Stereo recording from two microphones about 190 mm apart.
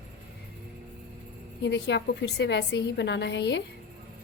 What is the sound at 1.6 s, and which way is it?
A woman's voice, 65° left (ahead or behind).